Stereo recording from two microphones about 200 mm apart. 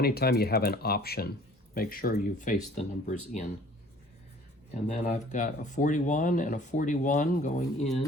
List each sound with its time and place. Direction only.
0.0 s speech: 50° left (ahead or behind); by 3.4 s 35° left (ahead or behind)
4.7 s speech: 35° left (ahead or behind)